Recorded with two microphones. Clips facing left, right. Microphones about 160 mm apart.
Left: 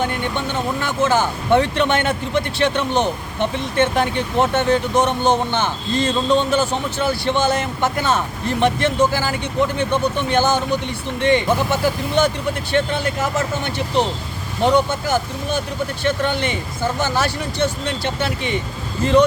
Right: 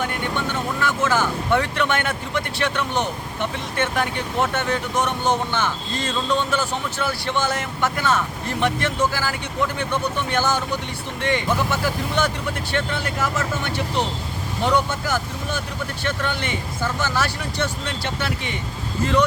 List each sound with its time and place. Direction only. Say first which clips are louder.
0.0 s speech: left 3 dB; 25° left (ahead or behind)